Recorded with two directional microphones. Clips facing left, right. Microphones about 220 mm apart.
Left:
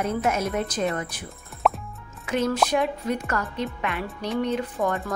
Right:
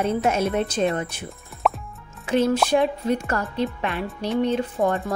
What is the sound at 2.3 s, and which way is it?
Speech, 30° right (ahead or behind).